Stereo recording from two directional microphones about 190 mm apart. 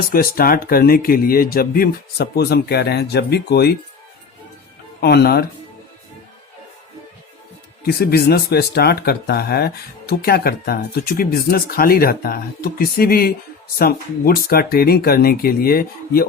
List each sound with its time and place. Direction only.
0.1 s speech: 50° left (ahead or behind)
4.9 s speech: 55° left (ahead or behind)
7.9 s speech: 55° left (ahead or behind)